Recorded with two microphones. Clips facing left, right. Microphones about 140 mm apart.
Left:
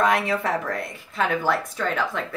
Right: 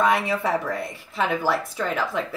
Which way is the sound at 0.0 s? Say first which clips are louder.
Even; centre (ahead or behind).